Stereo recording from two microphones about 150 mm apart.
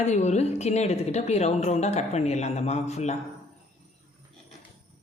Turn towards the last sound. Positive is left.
turn(degrees=50)  # may be behind; listen again after turning